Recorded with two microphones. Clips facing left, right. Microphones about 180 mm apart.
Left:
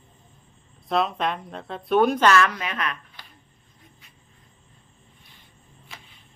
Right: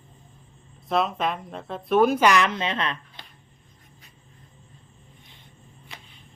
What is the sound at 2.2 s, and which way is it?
A woman's voice, 20° right (ahead or behind).